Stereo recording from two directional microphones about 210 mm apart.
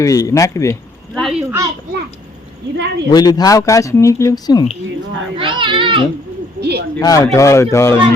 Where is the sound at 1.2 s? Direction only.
5° right (ahead or behind).